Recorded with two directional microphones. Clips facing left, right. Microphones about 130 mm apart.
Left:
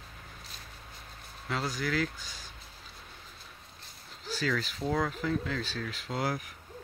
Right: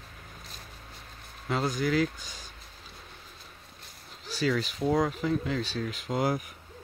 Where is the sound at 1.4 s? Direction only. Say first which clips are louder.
Right 5 dB; 20° right (ahead or behind).